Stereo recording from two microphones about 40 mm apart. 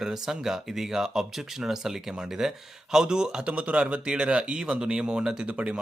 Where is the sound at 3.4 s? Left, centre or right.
Right.